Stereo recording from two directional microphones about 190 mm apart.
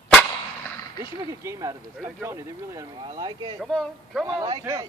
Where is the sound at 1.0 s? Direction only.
15° right (ahead or behind).